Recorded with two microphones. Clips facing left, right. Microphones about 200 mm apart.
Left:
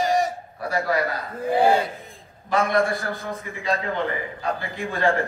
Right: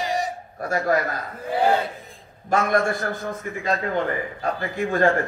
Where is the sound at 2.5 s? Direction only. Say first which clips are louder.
Even; 50° right (ahead or behind).